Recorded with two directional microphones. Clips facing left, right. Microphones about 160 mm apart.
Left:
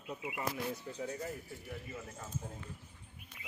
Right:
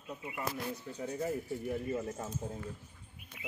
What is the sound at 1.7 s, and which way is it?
Speech, 45° right (ahead or behind).